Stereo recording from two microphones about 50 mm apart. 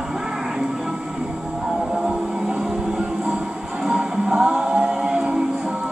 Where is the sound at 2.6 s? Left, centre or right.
Centre.